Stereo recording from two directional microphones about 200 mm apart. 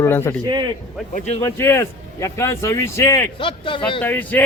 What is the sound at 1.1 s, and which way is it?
Speech, 35° left (ahead or behind).